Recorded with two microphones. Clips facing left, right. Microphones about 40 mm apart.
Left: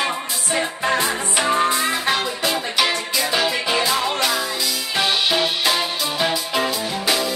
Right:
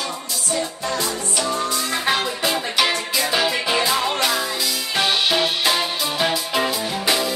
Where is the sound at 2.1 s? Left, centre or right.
Centre.